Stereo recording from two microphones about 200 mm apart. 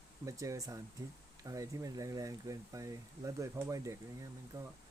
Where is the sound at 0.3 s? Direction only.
15° right (ahead or behind).